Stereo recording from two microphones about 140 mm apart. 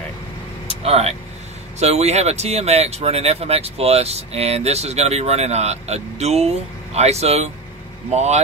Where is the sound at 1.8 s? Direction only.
50° right (ahead or behind).